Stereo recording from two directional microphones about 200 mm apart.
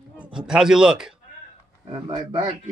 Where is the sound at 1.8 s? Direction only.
25° right (ahead or behind).